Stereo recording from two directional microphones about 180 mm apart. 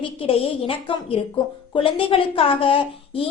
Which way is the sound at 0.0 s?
30° left (ahead or behind).